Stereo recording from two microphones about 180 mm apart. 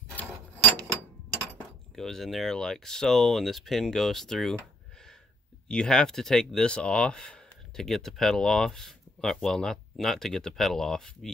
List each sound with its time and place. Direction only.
0.1 s a sound: 5° left (ahead or behind)
2.0 s speech: centre (ahead or behind)
5.7 s speech: 5° left (ahead or behind)